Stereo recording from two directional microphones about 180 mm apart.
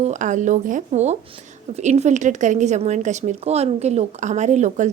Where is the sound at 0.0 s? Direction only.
40° right (ahead or behind).